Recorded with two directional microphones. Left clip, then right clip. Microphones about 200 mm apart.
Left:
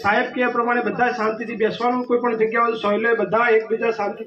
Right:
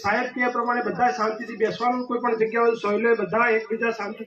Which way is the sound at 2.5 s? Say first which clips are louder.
Left 2 dB; 55° left (ahead or behind).